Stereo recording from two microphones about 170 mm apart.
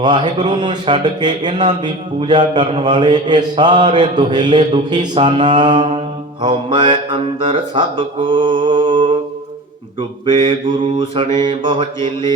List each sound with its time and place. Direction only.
0.0 s mantra: 25° right (ahead or behind)
10.2 s mantra: 30° right (ahead or behind)